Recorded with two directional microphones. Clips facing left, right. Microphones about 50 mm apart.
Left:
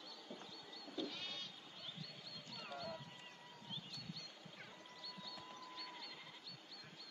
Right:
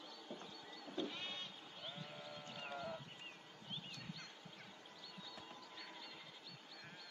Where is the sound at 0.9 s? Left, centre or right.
Right.